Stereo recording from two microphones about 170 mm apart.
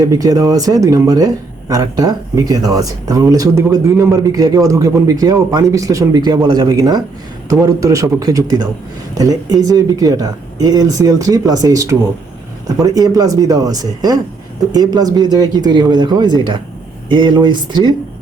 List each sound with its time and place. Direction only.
0.0 s speech: 20° right (ahead or behind)